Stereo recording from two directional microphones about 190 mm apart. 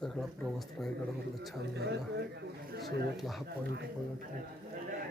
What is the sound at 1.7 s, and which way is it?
A man's voice, 60° right (ahead or behind).